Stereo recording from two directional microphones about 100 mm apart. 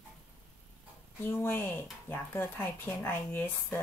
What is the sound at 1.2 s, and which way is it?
Speech, 20° left (ahead or behind).